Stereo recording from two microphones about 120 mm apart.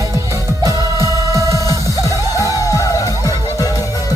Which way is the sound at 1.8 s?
30° left (ahead or behind).